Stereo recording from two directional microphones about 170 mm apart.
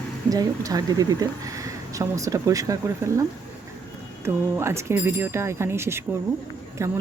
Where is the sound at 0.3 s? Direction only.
20° right (ahead or behind).